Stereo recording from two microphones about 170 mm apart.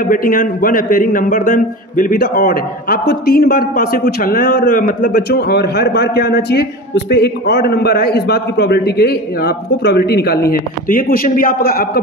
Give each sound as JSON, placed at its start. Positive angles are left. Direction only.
{"t": 0.0, "sound": "a man's voice", "side_deg": 55}